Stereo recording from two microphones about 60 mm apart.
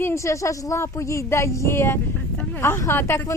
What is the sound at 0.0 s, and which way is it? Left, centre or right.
A woman's voice, left.